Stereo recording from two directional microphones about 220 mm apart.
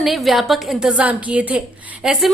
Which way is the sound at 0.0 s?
Centre (ahead or behind).